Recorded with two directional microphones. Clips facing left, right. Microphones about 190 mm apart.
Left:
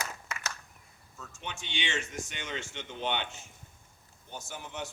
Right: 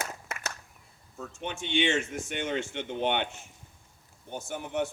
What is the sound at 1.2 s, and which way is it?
A man's voice, 55° right (ahead or behind).